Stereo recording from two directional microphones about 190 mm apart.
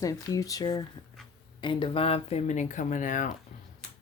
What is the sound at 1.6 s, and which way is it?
Speech, 25° left (ahead or behind).